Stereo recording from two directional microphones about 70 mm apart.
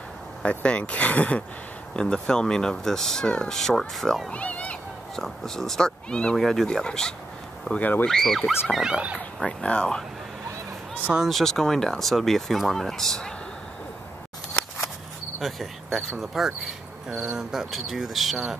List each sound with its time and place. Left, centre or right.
0.4 s speech: centre
4.3 s speech: centre
5.1 s speech: centre
7.7 s speech: left
8.1 s speech: centre
8.8 s speech: centre
9.4 s speech: centre
11.2 s speech: centre
15.4 s speech: centre